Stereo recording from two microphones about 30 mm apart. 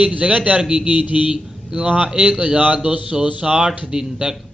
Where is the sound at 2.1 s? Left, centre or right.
Right.